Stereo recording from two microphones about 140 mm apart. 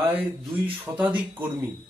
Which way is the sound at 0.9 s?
15° right (ahead or behind).